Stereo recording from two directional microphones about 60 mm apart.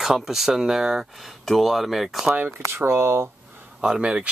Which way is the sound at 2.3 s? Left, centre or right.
Right.